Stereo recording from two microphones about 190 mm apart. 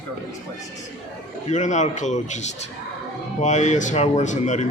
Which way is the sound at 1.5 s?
40° left (ahead or behind).